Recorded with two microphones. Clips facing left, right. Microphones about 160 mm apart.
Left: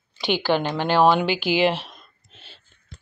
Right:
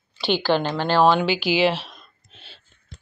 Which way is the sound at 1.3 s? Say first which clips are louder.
Even; 55° left (ahead or behind).